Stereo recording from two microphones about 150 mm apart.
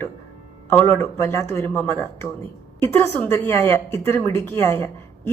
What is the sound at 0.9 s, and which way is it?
A woman's voice, 20° left (ahead or behind).